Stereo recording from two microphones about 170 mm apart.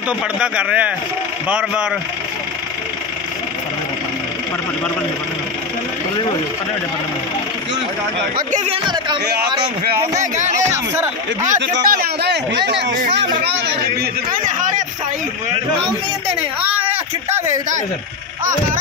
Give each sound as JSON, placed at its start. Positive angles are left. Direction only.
{"t": 0.4, "sound": "speech", "side_deg": -5}
{"t": 8.5, "sound": "speech", "side_deg": -45}
{"t": 10.3, "sound": "speech", "side_deg": -45}
{"t": 11.6, "sound": "a man's voice", "side_deg": -90}
{"t": 11.9, "sound": "a sound", "side_deg": -65}
{"t": 12.6, "sound": "a man's voice", "side_deg": -90}
{"t": 13.4, "sound": "a sound", "side_deg": -75}
{"t": 14.3, "sound": "speech", "side_deg": -50}